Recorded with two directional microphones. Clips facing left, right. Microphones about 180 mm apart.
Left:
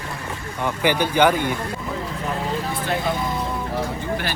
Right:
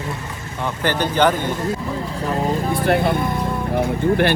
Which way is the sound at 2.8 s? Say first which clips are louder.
Right 7 dB; 60° right (ahead or behind).